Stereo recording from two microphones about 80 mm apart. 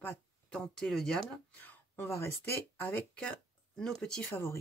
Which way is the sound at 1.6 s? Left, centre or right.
Left.